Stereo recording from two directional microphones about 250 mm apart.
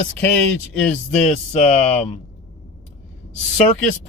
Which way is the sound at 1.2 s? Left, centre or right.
Left.